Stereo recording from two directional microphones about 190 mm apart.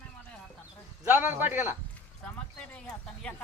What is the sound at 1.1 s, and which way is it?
Speech, 10° right (ahead or behind).